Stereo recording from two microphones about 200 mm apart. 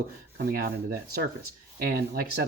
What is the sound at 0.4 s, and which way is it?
Speech, 50° right (ahead or behind).